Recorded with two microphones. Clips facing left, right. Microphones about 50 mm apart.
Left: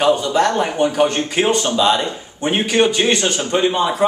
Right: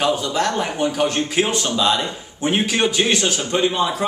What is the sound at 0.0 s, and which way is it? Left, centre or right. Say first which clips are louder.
A man's voice: left 5 dB; centre.